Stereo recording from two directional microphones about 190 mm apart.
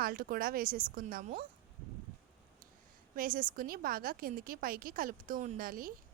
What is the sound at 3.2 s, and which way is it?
A woman's voice, 45° right (ahead or behind).